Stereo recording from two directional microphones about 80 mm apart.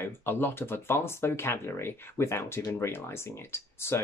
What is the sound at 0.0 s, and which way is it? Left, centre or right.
Speech, left.